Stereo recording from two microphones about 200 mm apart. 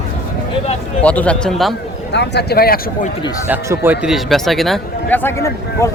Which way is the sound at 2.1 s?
55° left (ahead or behind).